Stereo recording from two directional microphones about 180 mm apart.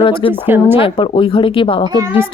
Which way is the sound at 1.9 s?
20° right (ahead or behind).